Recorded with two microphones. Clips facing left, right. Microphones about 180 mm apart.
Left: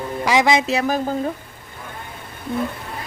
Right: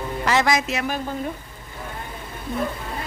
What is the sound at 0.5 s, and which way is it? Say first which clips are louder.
Speech: left 5 dB; 30° left (ahead or behind).